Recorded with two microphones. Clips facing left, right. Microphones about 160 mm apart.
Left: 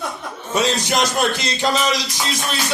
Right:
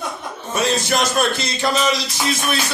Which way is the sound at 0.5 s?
15° left (ahead or behind).